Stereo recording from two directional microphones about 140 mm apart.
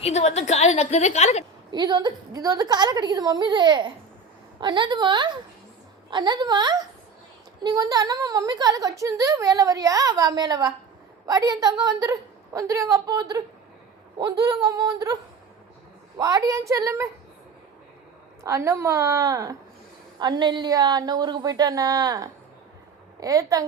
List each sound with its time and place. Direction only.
0.0 s a woman's voice: 50° left (ahead or behind)
1.7 s a woman's voice: 30° right (ahead or behind)
18.4 s a woman's voice: 20° right (ahead or behind)